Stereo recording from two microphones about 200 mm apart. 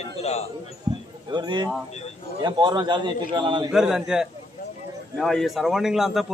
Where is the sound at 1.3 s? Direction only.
25° right (ahead or behind).